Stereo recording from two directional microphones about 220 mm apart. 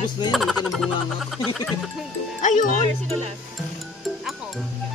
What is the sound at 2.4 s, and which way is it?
Speech, 35° left (ahead or behind).